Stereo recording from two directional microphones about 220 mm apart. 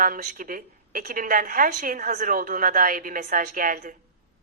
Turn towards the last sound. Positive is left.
turn(degrees=-35)  # may be behind; listen again after turning